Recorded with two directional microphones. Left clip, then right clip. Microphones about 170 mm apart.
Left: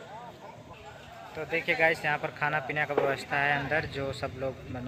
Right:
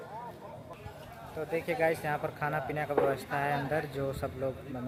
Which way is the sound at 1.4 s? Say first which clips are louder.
Left 4 dB; 5° right (ahead or behind).